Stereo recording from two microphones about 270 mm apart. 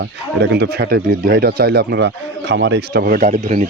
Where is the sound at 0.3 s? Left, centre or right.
Right.